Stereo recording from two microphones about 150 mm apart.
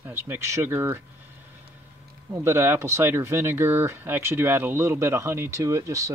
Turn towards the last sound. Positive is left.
turn(degrees=-20)  # may be behind; listen again after turning